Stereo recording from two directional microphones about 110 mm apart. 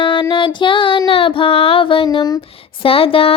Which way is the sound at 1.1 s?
55° left (ahead or behind).